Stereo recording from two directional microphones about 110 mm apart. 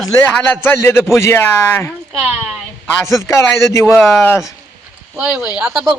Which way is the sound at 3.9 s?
5° left (ahead or behind).